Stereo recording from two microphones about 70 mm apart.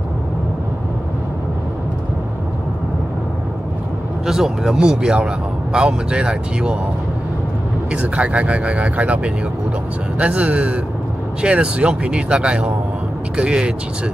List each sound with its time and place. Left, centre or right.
4.3 s speech: centre
7.9 s speech: centre